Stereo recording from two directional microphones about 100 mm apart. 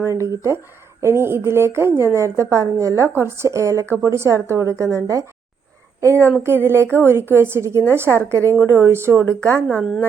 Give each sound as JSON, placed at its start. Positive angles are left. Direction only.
{"t": 0.0, "sound": "a woman's voice", "side_deg": -30}
{"t": 6.8, "sound": "a woman's voice", "side_deg": 20}
{"t": 7.1, "sound": "a woman's voice", "side_deg": -25}